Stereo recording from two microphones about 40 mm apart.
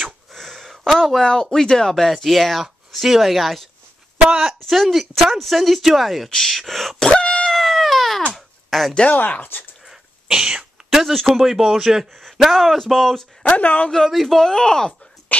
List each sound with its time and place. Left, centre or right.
0.3 s gasp: centre
1.2 s speech: centre
4.4 s speech: centre
4.7 s speech: centre
7.1 s a sound: left
7.4 s a sound: centre
9.3 s speech: left
9.8 s throat clearing: centre
10.9 s speech: centre
12.4 s speech: centre
13.4 s speech: left
13.9 s speech: centre